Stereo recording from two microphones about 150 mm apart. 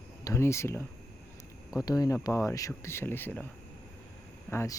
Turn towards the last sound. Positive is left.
turn(degrees=20)  # may be behind; listen again after turning